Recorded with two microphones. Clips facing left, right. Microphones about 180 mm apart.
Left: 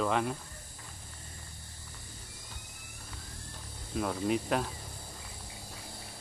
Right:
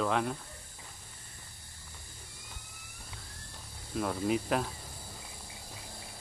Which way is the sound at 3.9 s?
Centre (ahead or behind).